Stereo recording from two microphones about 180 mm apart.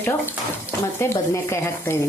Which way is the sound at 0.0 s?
10° left (ahead or behind).